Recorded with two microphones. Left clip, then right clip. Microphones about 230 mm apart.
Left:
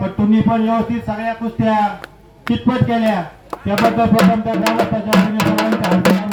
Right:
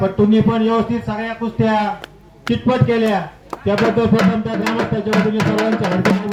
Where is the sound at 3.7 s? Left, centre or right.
Left.